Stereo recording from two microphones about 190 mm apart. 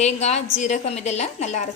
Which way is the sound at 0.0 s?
35° left (ahead or behind).